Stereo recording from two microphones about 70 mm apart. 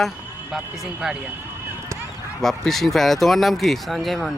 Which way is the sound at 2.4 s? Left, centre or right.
Centre.